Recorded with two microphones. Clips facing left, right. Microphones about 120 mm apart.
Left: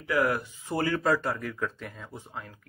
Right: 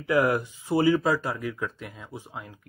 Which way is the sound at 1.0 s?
Centre (ahead or behind).